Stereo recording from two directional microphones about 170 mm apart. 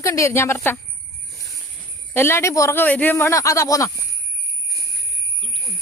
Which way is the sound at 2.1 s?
15° left (ahead or behind).